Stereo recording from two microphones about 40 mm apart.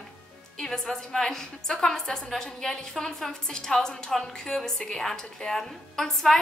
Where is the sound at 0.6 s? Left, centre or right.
Centre.